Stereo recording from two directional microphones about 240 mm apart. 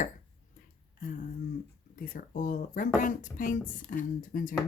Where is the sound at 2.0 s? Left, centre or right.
Left.